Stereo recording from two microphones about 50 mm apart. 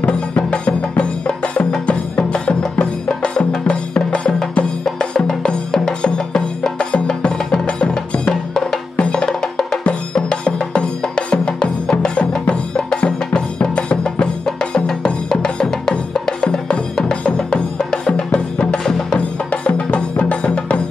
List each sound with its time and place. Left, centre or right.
0.4 s music: left